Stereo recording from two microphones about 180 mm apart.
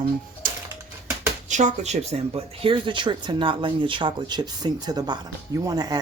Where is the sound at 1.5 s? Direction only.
40° right (ahead or behind).